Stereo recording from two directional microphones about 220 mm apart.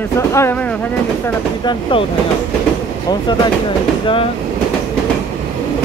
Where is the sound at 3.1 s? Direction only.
15° left (ahead or behind).